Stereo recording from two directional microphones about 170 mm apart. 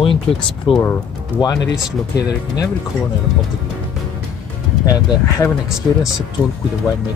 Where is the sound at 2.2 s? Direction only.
20° left (ahead or behind).